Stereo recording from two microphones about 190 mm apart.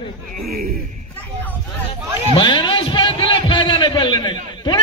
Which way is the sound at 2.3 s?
25° left (ahead or behind).